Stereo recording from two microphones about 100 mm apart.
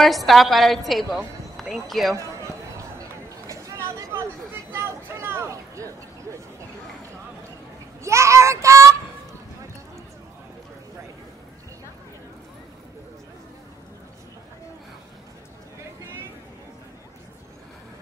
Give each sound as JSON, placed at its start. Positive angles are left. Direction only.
{"t": 0.0, "sound": "a woman's voice", "side_deg": 0}
{"t": 2.1, "sound": "a sound", "side_deg": -30}
{"t": 8.0, "sound": "a child's voice", "side_deg": -30}